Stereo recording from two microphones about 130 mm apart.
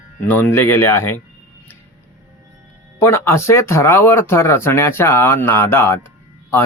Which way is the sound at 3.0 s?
20° left (ahead or behind).